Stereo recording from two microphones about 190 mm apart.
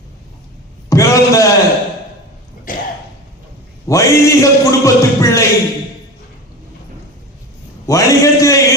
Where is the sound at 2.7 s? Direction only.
45° left (ahead or behind).